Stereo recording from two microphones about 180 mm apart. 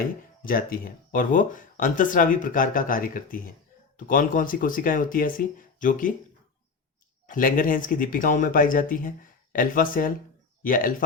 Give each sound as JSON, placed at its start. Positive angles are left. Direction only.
{"t": 0.4, "sound": "speech", "side_deg": 55}
{"t": 7.3, "sound": "speech", "side_deg": 50}